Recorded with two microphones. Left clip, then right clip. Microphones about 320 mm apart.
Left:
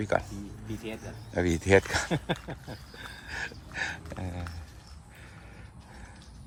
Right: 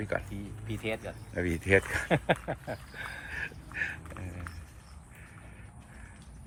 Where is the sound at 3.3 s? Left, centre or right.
Centre.